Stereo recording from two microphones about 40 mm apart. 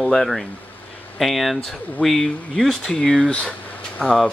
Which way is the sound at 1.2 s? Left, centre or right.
Centre.